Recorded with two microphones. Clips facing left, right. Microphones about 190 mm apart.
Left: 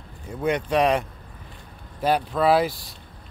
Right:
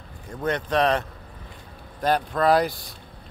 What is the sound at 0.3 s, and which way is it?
Speech, 10° left (ahead or behind).